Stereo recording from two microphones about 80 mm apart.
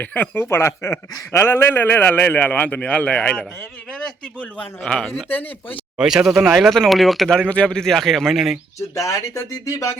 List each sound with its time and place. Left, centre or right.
0.0 s a man's voice: left
4.5 s a man's voice: centre
6.0 s speech: centre
9.0 s speech: left